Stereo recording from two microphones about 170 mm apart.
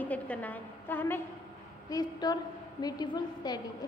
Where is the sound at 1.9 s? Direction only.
25° left (ahead or behind).